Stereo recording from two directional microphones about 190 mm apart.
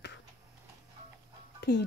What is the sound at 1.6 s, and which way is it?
Music, 65° left (ahead or behind).